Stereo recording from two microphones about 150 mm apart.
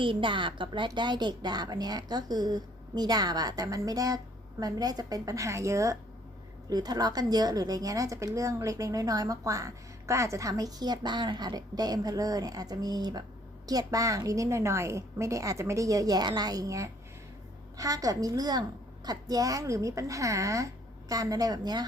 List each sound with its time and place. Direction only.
0.0 s speech: 35° right (ahead or behind)